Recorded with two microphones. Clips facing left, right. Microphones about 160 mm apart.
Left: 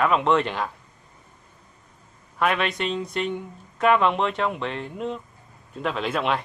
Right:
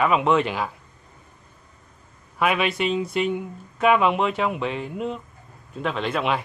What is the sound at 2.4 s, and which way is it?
Speech, 5° right (ahead or behind).